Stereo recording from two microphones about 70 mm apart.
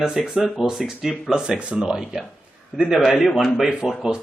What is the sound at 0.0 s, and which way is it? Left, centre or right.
Speech, centre.